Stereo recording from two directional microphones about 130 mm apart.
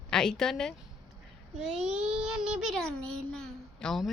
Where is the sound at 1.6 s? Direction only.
10° right (ahead or behind).